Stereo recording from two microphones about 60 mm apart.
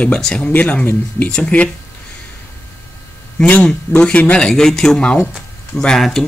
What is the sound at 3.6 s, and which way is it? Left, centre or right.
Speech, centre.